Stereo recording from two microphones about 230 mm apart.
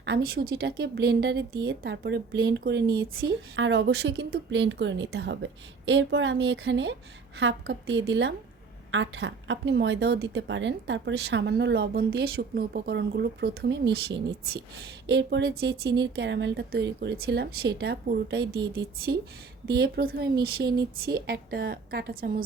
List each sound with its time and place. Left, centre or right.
0.0 s a woman's voice: right
3.5 s a woman's voice: right
15.0 s a woman's voice: right